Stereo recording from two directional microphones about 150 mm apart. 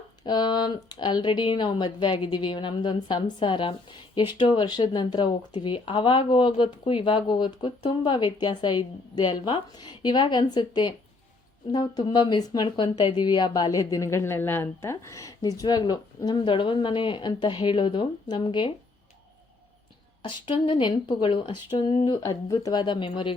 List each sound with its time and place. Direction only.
0.3 s a woman's voice: 30° left (ahead or behind)
20.5 s speech: 35° left (ahead or behind)